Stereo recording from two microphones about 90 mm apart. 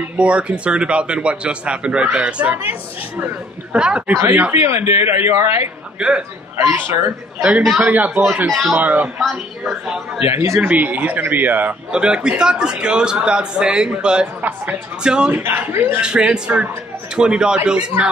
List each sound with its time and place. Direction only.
0.0 s a man's voice: 15° right (ahead or behind)
3.7 s a man's voice: 10° right (ahead or behind)
4.3 s speech: 20° right (ahead or behind)
5.9 s a man's voice: 10° right (ahead or behind)
6.5 s speech: 30° right (ahead or behind)
7.4 s a man's voice: 5° right (ahead or behind)
7.8 s a man's voice: 15° right (ahead or behind)
8.5 s a man's voice: centre (ahead or behind)
8.7 s a man's voice: 20° right (ahead or behind)
11.9 s a man's voice: 10° right (ahead or behind)
15.3 s speech: 25° right (ahead or behind)
16.0 s a man's voice: 10° right (ahead or behind)